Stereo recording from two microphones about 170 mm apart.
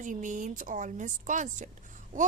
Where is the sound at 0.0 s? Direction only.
45° right (ahead or behind).